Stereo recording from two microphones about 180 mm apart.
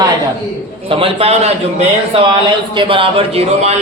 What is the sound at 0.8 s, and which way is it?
Speech, 30° right (ahead or behind).